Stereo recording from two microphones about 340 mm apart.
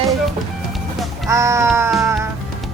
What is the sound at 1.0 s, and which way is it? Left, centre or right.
Speech, centre.